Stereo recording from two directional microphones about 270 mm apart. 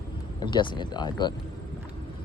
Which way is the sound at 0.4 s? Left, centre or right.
Centre.